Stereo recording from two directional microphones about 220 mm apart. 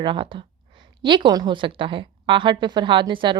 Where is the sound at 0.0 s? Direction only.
20° right (ahead or behind).